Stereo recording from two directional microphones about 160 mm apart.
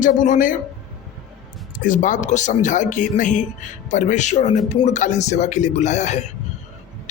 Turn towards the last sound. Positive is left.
turn(degrees=45)  # may be behind; listen again after turning